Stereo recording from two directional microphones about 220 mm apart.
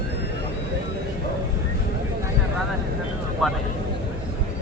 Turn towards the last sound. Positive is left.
turn(degrees=0)  # may be behind; listen again after turning